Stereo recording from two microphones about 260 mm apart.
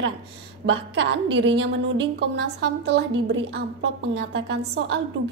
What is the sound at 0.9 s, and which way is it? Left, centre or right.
Speech, right.